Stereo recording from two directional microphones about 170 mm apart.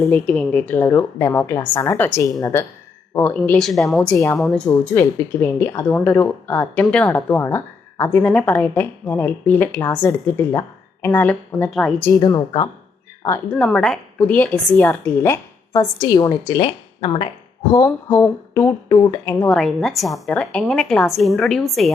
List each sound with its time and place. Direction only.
0.0 s a woman's voice: 10° left (ahead or behind)
8.2 s a woman's voice: 5° left (ahead or behind)
12.1 s a woman's voice: 20° left (ahead or behind)
13.6 s a woman's voice: 5° left (ahead or behind); by 17.2 s 30° left (ahead or behind)
17.7 s a woman's voice: 20° left (ahead or behind)
19.5 s a woman's voice: centre (ahead or behind)